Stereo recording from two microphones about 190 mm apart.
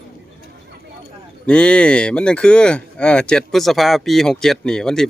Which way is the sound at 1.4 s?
5° left (ahead or behind).